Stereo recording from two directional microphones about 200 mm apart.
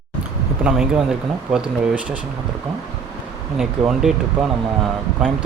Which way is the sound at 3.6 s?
Centre (ahead or behind).